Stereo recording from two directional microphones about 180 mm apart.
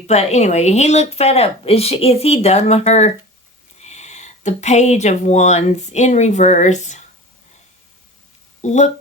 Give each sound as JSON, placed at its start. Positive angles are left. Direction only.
{"t": 0.1, "sound": "a woman's voice", "side_deg": 35}
{"t": 8.6, "sound": "a woman's voice", "side_deg": 40}